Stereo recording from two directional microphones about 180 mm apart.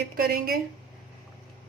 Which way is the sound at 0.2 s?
60° right (ahead or behind).